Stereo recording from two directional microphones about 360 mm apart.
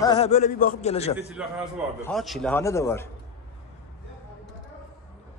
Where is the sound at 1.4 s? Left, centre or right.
Centre.